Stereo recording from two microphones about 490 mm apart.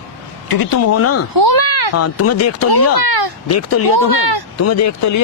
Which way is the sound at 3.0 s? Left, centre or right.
Right.